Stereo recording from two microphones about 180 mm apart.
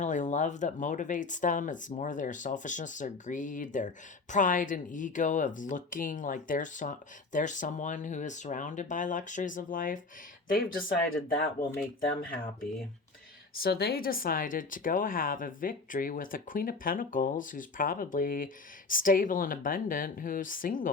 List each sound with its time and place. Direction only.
0.0 s speech: 45° left (ahead or behind)